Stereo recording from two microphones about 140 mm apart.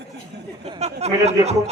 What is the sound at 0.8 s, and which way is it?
Speech, 50° right (ahead or behind).